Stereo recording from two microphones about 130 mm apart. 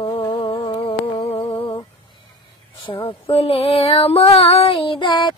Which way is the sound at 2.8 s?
45° left (ahead or behind).